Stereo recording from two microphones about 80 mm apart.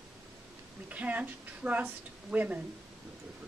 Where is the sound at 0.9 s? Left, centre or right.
Centre.